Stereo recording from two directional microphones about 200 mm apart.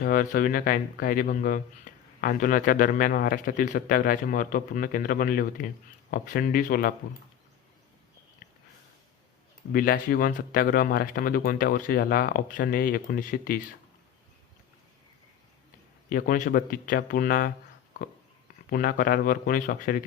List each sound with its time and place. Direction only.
0.0 s a man's voice: 45° left (ahead or behind)
9.7 s a man's voice: 45° left (ahead or behind)
16.0 s a man's voice: 40° left (ahead or behind)
18.7 s a man's voice: 45° left (ahead or behind)